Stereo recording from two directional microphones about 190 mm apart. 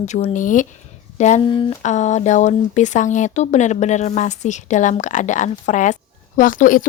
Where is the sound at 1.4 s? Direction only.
25° left (ahead or behind).